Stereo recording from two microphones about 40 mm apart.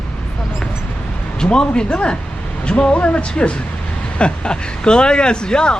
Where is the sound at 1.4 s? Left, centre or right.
Left.